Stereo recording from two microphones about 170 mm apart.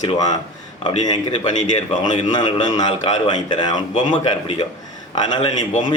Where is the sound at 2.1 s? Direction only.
25° left (ahead or behind).